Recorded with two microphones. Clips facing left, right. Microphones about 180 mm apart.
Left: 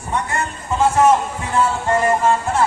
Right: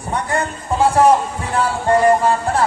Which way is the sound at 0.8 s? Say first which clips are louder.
Right 1 dB; 35° right (ahead or behind).